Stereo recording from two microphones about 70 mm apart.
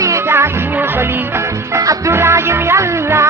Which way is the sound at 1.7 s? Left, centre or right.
Right.